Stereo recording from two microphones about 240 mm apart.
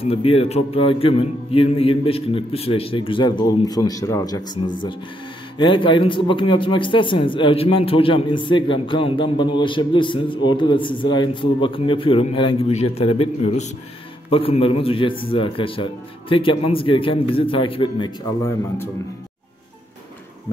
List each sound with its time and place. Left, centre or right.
0.0 s speech: left
5.6 s speech: centre
20.5 s a sound: centre